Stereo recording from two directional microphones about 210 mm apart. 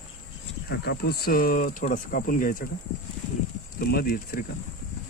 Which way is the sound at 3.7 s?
45° left (ahead or behind).